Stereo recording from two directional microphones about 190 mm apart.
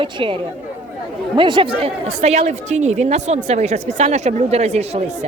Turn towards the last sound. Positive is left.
turn(degrees=-35)  # may be behind; listen again after turning